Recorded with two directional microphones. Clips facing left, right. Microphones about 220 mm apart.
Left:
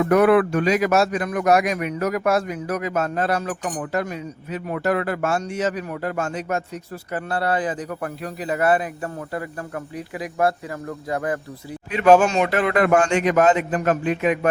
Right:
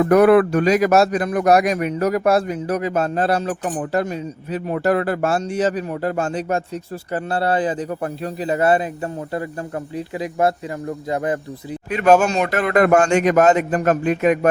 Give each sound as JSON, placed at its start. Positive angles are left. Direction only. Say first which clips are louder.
{"t": 0.0, "sound": "speech", "louder": "right 3 dB", "side_deg": -40}
{"t": 11.9, "sound": "a man's voice", "louder": "even", "side_deg": -45}